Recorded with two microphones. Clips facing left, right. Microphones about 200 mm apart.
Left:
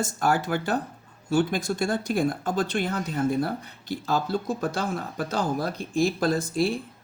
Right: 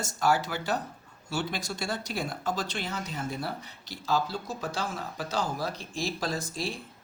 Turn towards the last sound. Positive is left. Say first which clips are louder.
# left 9 dB
turn(degrees=55)  # may be behind; listen again after turning